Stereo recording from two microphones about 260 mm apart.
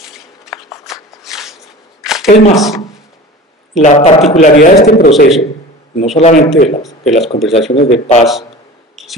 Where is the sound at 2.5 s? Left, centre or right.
Centre.